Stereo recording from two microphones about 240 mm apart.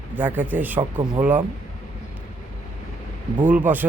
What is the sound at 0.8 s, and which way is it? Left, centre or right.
Speech, centre.